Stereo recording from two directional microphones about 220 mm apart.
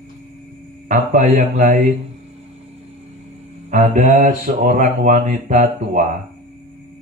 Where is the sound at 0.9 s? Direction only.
35° right (ahead or behind).